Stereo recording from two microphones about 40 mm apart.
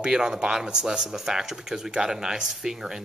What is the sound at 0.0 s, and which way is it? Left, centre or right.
Speech, centre.